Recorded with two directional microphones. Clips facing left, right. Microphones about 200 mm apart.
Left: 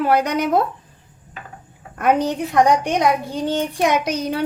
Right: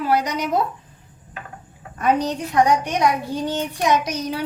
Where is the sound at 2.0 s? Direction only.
60° left (ahead or behind).